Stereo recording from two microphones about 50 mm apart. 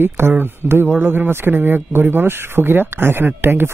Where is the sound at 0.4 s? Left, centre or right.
Right.